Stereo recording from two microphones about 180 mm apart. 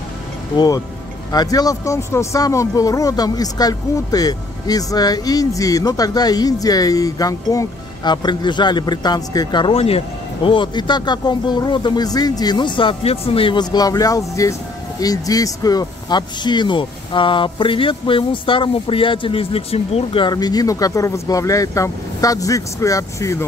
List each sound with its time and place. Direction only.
1.3 s speech: 20° left (ahead or behind)